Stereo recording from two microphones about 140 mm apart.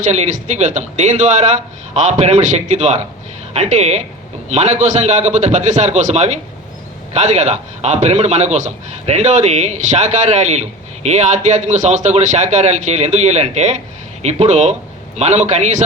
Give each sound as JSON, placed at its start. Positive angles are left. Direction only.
{"t": 0.0, "sound": "a man's voice", "side_deg": -55}